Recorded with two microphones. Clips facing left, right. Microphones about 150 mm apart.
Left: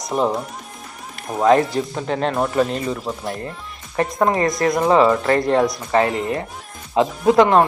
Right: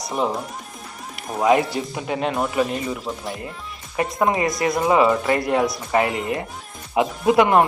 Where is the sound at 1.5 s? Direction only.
10° right (ahead or behind).